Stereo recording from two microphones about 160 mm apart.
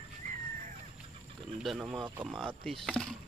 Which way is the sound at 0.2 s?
55° right (ahead or behind).